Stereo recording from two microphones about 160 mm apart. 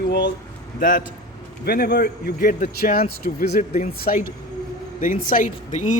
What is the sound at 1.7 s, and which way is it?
A man's voice, 75° left (ahead or behind).